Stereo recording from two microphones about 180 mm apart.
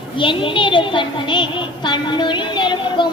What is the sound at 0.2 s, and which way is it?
Music, 30° left (ahead or behind).